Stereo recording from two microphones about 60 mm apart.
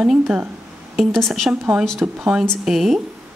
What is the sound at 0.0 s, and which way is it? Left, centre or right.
Speech, centre.